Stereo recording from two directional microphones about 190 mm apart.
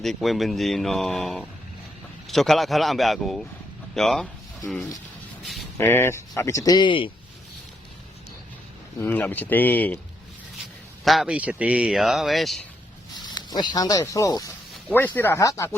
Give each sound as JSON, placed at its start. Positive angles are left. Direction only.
{"t": 0.0, "sound": "a man's voice", "side_deg": 0}
{"t": 5.4, "sound": "a sound", "side_deg": 0}
{"t": 5.7, "sound": "speech", "side_deg": 10}
{"t": 9.0, "sound": "speech", "side_deg": 10}
{"t": 11.0, "sound": "a man's voice", "side_deg": 0}
{"t": 13.2, "sound": "speech", "side_deg": 20}